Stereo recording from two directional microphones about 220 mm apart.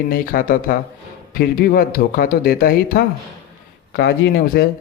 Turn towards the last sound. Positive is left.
turn(degrees=45)  # may be behind; listen again after turning